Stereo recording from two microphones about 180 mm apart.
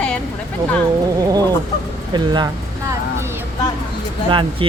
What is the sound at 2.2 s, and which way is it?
Speech, 25° right (ahead or behind).